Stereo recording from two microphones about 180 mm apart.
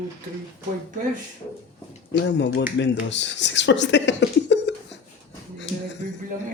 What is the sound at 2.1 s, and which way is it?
Speech, 75° left (ahead or behind).